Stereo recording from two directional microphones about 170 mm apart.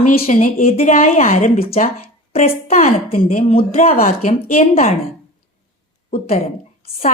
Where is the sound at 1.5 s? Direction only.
35° left (ahead or behind).